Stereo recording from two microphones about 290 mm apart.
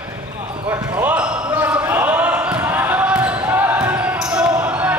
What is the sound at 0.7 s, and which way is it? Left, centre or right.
Basketball bounce, centre.